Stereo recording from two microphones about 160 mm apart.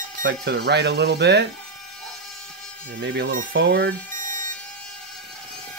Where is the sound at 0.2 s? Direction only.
90° right.